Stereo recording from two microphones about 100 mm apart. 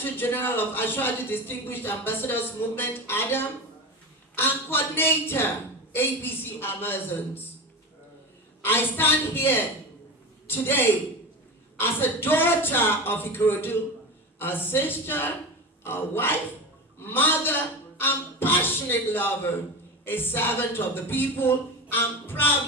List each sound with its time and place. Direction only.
0.0 s speech: 20° left (ahead or behind)
8.6 s a woman's voice: 20° left (ahead or behind)